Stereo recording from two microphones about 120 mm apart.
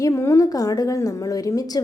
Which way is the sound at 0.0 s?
25° left (ahead or behind).